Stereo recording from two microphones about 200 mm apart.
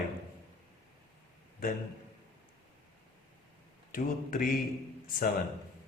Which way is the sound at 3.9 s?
45° left (ahead or behind).